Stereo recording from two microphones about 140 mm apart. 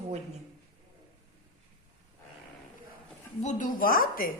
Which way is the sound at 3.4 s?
75° left (ahead or behind).